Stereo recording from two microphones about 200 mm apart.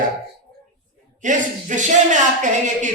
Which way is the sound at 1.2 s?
40° right (ahead or behind).